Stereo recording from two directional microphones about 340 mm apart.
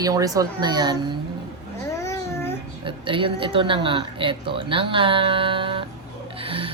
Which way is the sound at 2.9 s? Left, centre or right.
Centre.